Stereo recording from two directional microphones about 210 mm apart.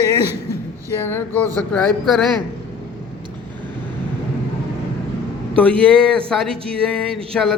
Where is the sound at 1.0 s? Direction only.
10° left (ahead or behind).